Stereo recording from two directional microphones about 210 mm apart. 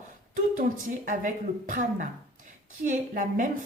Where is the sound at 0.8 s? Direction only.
40° right (ahead or behind).